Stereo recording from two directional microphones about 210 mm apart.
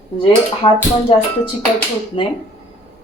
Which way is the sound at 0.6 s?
25° left (ahead or behind).